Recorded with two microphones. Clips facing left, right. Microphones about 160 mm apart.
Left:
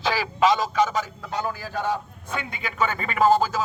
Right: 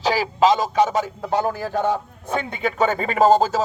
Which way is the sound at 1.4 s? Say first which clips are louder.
Right 4 dB; 50° right (ahead or behind).